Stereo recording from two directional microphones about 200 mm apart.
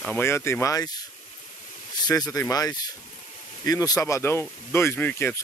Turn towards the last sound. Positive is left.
turn(degrees=10)  # may be behind; listen again after turning